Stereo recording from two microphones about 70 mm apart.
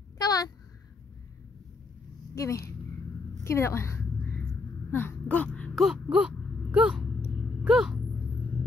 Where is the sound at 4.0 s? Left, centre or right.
Left.